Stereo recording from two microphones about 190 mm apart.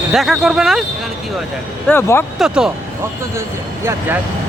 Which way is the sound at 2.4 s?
Centre (ahead or behind).